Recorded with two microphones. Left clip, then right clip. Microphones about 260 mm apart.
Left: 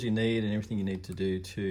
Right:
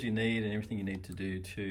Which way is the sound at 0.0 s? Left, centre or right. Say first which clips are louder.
Left 3 dB; centre.